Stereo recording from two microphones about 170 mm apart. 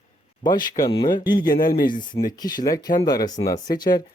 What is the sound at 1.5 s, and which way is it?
Speech, 55° left (ahead or behind).